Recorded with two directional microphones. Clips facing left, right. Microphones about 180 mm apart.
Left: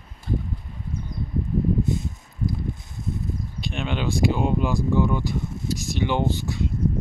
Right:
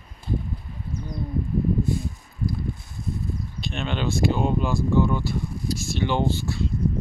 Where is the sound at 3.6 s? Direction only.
15° left (ahead or behind).